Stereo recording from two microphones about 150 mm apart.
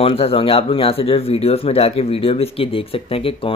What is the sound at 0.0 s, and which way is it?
Speech, 40° left (ahead or behind).